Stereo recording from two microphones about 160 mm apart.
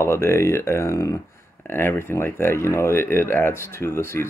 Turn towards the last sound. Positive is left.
turn(degrees=15)  # may be behind; listen again after turning